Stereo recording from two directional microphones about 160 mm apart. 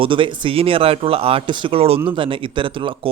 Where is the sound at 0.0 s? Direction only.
30° right (ahead or behind).